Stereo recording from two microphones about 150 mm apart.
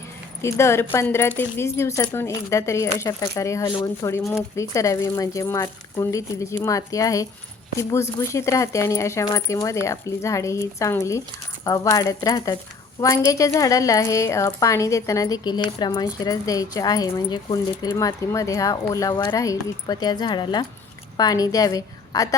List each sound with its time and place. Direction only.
0.4 s a woman's voice: 20° left (ahead or behind)